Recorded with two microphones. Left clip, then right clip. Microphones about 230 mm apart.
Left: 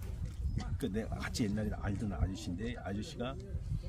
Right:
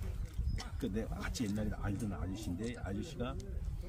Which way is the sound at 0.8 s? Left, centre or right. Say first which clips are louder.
Left 2 dB; left.